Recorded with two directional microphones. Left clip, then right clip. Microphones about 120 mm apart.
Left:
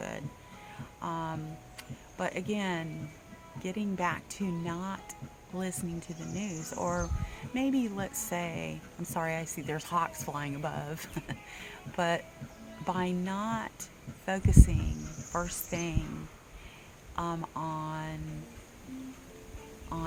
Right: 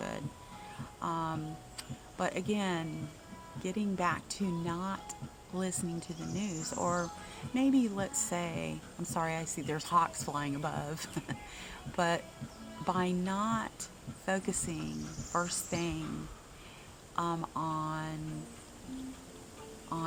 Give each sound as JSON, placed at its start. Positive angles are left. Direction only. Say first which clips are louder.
{"t": 1.0, "sound": "a sound", "louder": "right 1 dB", "side_deg": 10}
{"t": 3.6, "sound": "a woman's voice", "louder": "left 1 dB", "side_deg": 15}
{"t": 17.2, "sound": "a woman's voice", "louder": "right 1 dB", "side_deg": 15}
{"t": 19.9, "sound": "a woman's voice", "louder": "right 1 dB", "side_deg": 15}